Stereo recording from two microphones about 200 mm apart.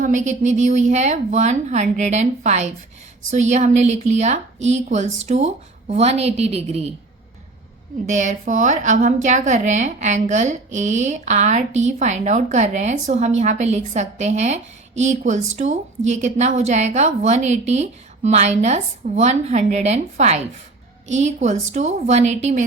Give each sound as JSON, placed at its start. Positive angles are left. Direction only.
{"t": 0.0, "sound": "a woman's voice", "side_deg": -40}
{"t": 8.0, "sound": "a woman's voice", "side_deg": -35}